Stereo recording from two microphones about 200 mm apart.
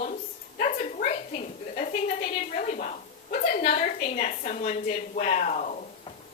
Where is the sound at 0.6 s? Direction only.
40° left (ahead or behind).